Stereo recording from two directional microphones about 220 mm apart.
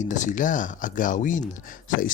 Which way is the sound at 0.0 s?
35° left (ahead or behind).